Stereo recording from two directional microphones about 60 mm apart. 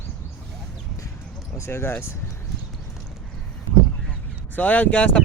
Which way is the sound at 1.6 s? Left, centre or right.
Left.